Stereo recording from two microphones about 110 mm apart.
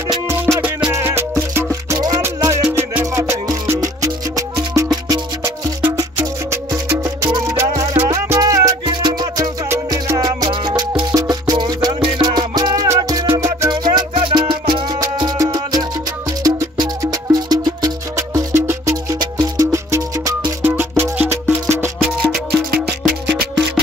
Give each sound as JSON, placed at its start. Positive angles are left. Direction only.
{"t": 0.6, "sound": "music", "side_deg": -10}
{"t": 0.9, "sound": "music", "side_deg": -20}
{"t": 2.4, "sound": "music", "side_deg": -35}
{"t": 5.8, "sound": "music", "side_deg": -20}
{"t": 12.8, "sound": "music", "side_deg": -25}
{"t": 13.7, "sound": "music", "side_deg": -40}
{"t": 22.3, "sound": "music", "side_deg": -5}